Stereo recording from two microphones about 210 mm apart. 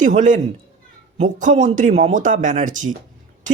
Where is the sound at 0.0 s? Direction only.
35° right (ahead or behind).